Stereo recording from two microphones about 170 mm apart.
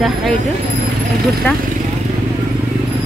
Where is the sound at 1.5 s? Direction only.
10° left (ahead or behind).